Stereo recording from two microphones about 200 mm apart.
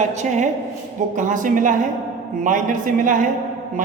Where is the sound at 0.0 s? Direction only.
35° right (ahead or behind).